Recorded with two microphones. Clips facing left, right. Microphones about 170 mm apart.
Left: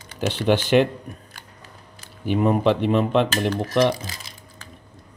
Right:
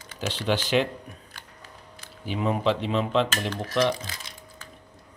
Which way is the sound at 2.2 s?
55° left (ahead or behind).